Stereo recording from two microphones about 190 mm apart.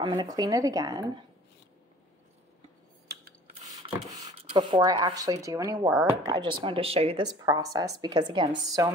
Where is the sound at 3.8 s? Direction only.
25° right (ahead or behind).